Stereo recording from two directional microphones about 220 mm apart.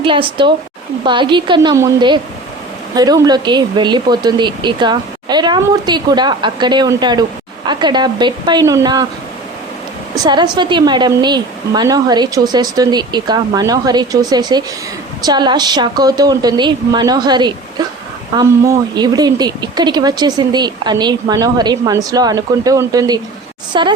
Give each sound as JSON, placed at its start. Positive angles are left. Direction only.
{"t": 0.0, "sound": "speech", "side_deg": -25}
{"t": 10.2, "sound": "speech", "side_deg": -20}